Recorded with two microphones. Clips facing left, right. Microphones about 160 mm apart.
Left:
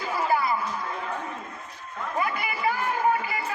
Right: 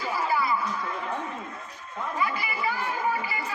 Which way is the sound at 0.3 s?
45° left (ahead or behind).